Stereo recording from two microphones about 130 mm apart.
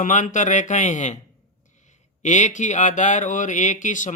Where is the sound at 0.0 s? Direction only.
75° left (ahead or behind).